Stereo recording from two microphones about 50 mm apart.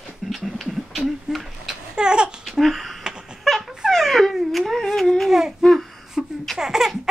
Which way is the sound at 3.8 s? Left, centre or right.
Centre.